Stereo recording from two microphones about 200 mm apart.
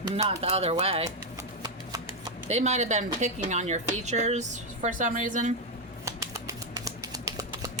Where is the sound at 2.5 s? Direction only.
35° right (ahead or behind).